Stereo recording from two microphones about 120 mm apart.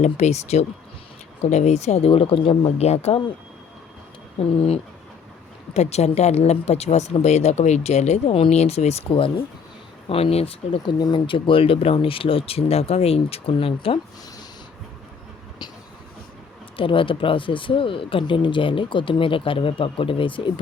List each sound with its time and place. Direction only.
0.0 s speech: 70° left (ahead or behind)
4.4 s speech: 60° left (ahead or behind)
10.8 s speech: 40° left (ahead or behind)
16.7 s speech: 45° left (ahead or behind)